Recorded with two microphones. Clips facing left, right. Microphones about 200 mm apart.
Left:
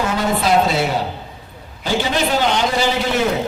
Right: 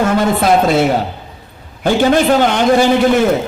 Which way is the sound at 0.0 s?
55° right (ahead or behind).